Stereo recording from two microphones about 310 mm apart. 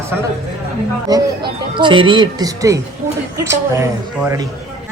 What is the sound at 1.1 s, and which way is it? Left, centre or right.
Speech, centre.